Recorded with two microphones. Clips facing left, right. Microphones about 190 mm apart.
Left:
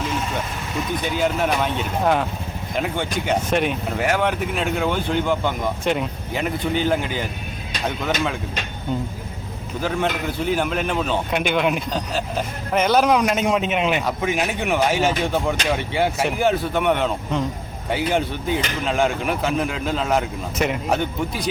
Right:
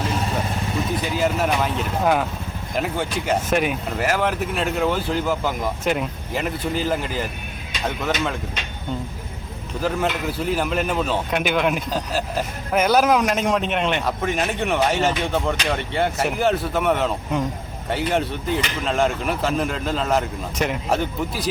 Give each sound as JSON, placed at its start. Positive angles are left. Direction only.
{"t": 1.1, "sound": "a man's voice", "side_deg": 0}
{"t": 9.8, "sound": "a man's voice", "side_deg": -5}